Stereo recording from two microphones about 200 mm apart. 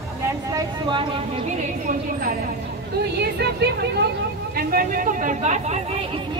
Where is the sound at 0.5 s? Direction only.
20° right (ahead or behind).